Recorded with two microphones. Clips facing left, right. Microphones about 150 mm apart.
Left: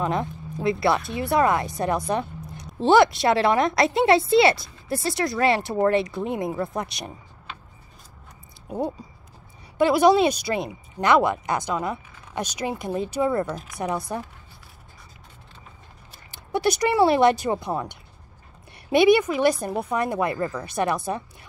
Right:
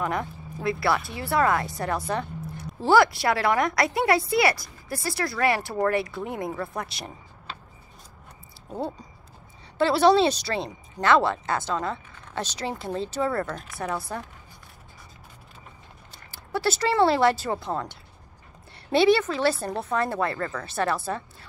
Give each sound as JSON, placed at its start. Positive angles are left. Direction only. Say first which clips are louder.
{"t": 0.0, "sound": "speech", "louder": "left 3 dB", "side_deg": 20}
{"t": 8.6, "sound": "speech", "louder": "left 4 dB", "side_deg": 15}
{"t": 16.3, "sound": "speech", "louder": "left 3 dB", "side_deg": 20}